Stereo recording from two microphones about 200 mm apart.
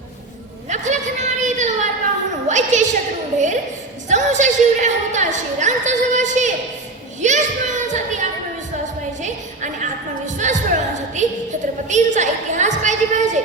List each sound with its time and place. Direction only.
0.7 s a sound: 35° right (ahead or behind)
2.5 s a woman's voice: 35° right (ahead or behind)
9.2 s a woman's voice: 35° right (ahead or behind)